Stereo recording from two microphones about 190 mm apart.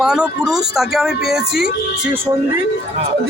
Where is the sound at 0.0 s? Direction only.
5° right (ahead or behind).